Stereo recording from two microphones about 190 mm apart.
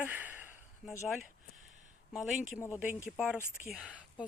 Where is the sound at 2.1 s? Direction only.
Centre (ahead or behind).